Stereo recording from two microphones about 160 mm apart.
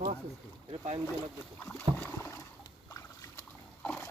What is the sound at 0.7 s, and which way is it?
Speech, 40° right (ahead or behind).